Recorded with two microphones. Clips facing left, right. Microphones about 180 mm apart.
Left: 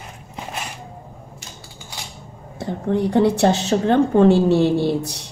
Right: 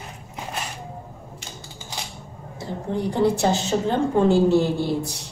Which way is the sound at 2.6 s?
65° left (ahead or behind).